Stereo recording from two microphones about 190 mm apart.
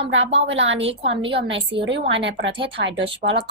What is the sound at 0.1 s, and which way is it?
Speech, 85° right.